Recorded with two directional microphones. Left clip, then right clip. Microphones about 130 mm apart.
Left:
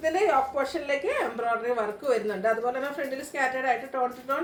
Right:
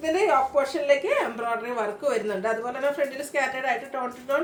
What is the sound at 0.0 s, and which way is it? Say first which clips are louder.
A woman's voice: right 2 dB; 20° right (ahead or behind).